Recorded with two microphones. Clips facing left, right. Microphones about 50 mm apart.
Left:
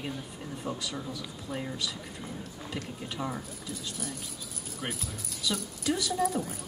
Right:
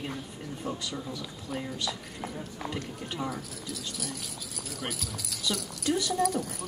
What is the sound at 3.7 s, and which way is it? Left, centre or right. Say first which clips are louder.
Speech: right 1 dB; right.